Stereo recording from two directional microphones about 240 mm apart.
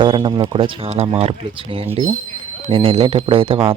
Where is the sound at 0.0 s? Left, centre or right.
Right.